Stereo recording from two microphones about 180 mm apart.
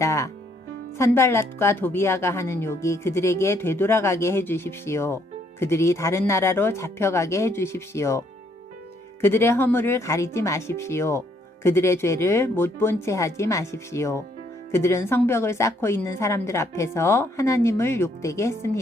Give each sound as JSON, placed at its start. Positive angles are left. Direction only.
{"t": 0.0, "sound": "music", "side_deg": 15}
{"t": 0.9, "sound": "speech", "side_deg": 15}
{"t": 9.2, "sound": "speech", "side_deg": 15}